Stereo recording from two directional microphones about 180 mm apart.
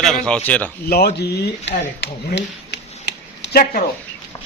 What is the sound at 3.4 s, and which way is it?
Speech, 55° left (ahead or behind).